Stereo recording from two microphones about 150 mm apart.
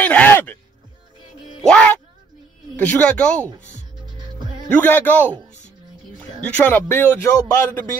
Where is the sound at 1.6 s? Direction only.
5° left (ahead or behind).